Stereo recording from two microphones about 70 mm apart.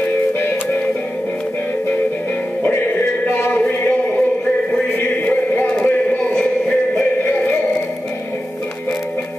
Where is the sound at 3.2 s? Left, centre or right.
Left.